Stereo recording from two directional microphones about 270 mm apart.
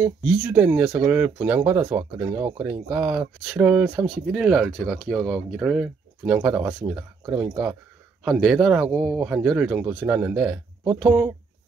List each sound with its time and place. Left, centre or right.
0.0 s speech: centre
10.8 s speech: centre